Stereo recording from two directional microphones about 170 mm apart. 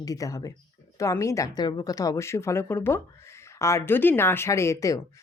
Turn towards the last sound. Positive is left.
turn(degrees=20)  # may be behind; listen again after turning